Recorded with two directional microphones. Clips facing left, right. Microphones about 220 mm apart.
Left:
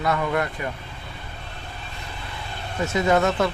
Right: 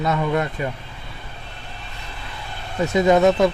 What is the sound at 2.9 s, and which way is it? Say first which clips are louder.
Speech: right 5 dB; 20° right (ahead or behind).